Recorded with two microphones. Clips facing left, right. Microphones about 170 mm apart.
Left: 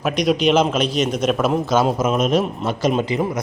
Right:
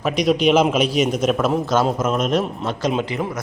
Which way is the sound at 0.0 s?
Centre (ahead or behind).